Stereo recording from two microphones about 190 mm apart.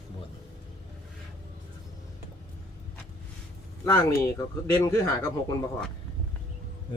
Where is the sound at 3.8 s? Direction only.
15° left (ahead or behind).